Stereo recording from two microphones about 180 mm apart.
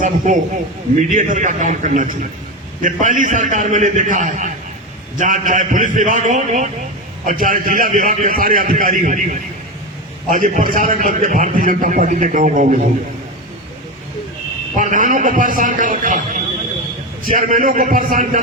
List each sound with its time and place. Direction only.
0.3 s a man's voice: 45° right (ahead or behind)
14.8 s a man's voice: 45° right (ahead or behind)